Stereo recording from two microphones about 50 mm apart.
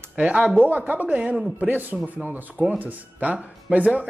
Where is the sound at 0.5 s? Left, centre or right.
Right.